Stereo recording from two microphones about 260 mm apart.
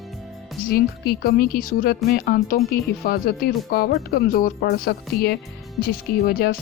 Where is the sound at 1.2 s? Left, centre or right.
Left.